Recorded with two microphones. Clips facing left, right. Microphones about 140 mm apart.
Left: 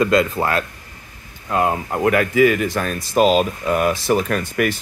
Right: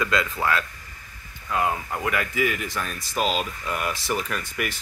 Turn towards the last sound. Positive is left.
turn(degrees=55)  # may be behind; listen again after turning